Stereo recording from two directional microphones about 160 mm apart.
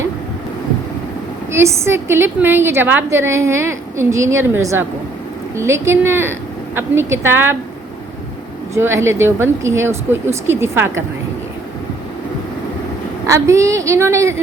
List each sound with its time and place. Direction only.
1.5 s a woman's voice: 15° right (ahead or behind)
8.7 s a woman's voice: 15° right (ahead or behind)
13.2 s a woman's voice: 20° right (ahead or behind)